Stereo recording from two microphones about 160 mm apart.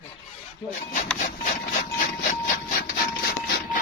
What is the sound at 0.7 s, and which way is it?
Speech, 50° left (ahead or behind).